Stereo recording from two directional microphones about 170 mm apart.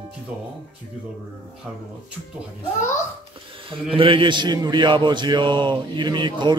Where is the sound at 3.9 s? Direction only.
30° right (ahead or behind).